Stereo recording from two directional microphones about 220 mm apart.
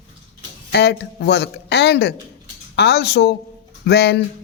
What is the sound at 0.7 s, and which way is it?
Speech, 50° left (ahead or behind).